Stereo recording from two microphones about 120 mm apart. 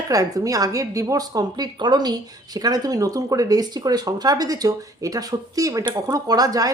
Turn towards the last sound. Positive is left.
turn(degrees=-30)  # may be behind; listen again after turning